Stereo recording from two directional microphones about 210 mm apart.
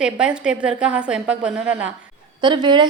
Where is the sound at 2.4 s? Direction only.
20° right (ahead or behind).